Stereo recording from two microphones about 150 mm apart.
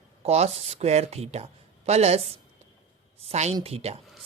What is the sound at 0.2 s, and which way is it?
A woman's voice, 45° right (ahead or behind).